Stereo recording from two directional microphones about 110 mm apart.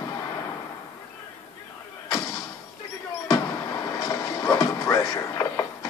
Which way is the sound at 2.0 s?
35° left (ahead or behind).